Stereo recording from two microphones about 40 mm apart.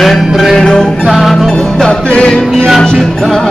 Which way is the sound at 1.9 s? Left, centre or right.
Left.